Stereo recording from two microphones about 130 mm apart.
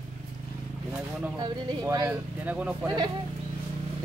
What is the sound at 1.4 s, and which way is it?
Speech, 30° right (ahead or behind).